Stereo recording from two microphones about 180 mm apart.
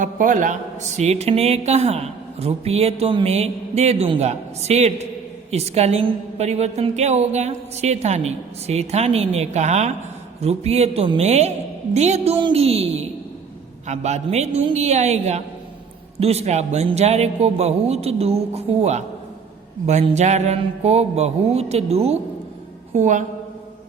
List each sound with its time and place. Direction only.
0.0 s a man's voice: 45° right (ahead or behind)